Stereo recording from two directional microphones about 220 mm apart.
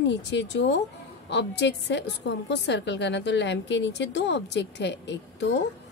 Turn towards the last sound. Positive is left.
turn(degrees=50)  # may be behind; listen again after turning